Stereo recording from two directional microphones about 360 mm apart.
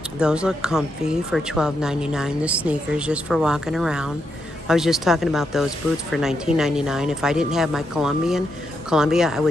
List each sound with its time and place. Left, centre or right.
0.2 s speech: centre